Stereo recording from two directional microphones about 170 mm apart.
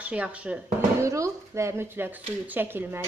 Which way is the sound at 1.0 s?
15° right (ahead or behind).